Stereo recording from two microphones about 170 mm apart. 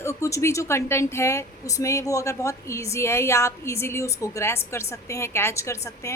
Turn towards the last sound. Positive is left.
turn(degrees=20)  # may be behind; listen again after turning